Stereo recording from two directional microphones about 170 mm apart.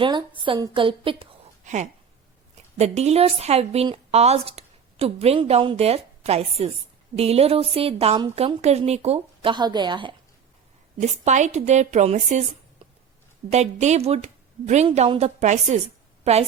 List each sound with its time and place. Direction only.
0.0 s speech: 30° right (ahead or behind)
1.6 s a woman's voice: 45° right (ahead or behind); by 10.2 s 30° right (ahead or behind)
11.0 s speech: 45° right (ahead or behind)
13.5 s a woman's voice: 40° right (ahead or behind)